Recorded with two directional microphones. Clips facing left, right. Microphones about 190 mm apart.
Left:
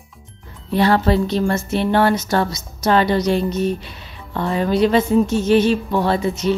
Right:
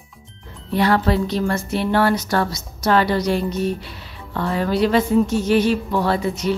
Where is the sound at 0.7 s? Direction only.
30° left (ahead or behind).